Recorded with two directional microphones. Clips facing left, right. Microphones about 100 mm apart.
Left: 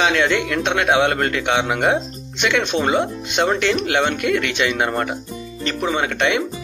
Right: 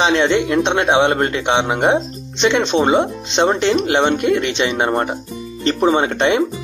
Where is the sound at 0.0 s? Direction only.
25° right (ahead or behind).